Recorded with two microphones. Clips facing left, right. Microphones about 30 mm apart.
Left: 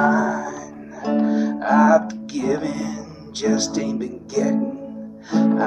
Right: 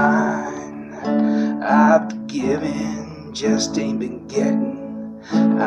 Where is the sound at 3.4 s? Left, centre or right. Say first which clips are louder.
Right 1 dB; centre.